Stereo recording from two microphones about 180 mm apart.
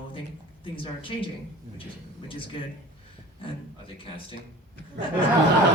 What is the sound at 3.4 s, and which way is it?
Speech, 30° left (ahead or behind).